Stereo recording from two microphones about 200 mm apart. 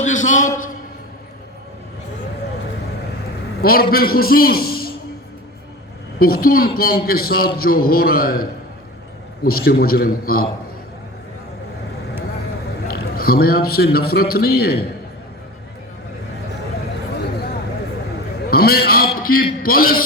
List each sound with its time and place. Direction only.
0.0 s a sound: 40° left (ahead or behind)
3.6 s a man's voice: 50° left (ahead or behind)
6.1 s a man's voice: 50° left (ahead or behind)
12.9 s a man's voice: 50° left (ahead or behind)
18.5 s a man's voice: 50° left (ahead or behind)